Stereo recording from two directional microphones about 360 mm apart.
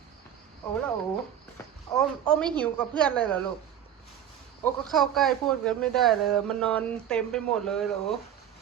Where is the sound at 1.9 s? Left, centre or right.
Centre.